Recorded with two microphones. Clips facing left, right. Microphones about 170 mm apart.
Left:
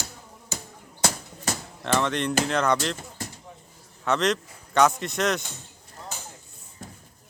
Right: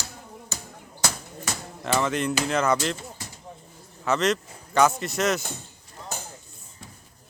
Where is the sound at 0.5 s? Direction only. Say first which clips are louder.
Left 4 dB; 20° left (ahead or behind).